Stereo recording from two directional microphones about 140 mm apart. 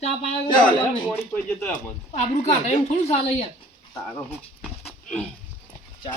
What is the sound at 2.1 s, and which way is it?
A woman's voice, 55° left (ahead or behind).